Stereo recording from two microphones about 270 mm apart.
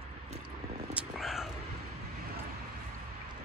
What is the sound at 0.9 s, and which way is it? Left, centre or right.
Vehicle, centre.